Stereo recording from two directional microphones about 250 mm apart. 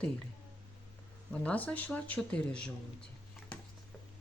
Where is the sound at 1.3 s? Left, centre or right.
Centre.